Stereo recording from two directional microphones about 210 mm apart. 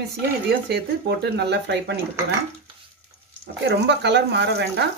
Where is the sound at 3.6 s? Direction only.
55° right (ahead or behind).